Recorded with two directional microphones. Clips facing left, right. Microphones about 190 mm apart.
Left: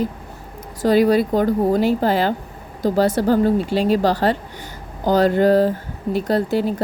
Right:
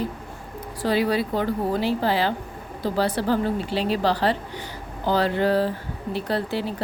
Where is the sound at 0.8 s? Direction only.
45° left (ahead or behind).